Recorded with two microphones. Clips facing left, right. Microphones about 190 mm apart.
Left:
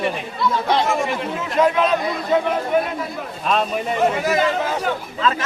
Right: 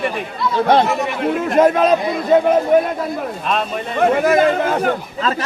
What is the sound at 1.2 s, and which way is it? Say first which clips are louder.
A man's voice: right 9 dB; 55° right (ahead or behind).